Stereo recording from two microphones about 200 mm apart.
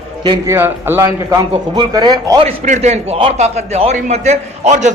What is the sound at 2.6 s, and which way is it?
A man's voice, 35° right (ahead or behind).